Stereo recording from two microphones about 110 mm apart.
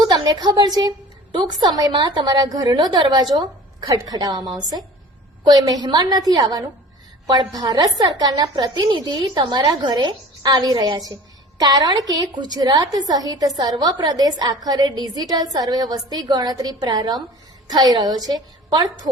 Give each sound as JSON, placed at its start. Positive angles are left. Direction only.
{"t": 0.0, "sound": "a woman's voice", "side_deg": -40}